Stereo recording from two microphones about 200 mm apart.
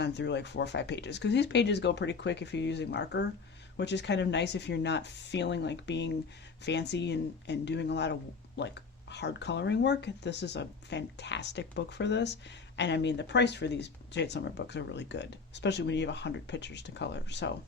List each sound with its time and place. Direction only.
0.0 s speech: 60° left (ahead or behind)